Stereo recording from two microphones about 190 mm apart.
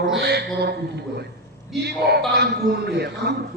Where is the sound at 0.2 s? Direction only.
60° right (ahead or behind).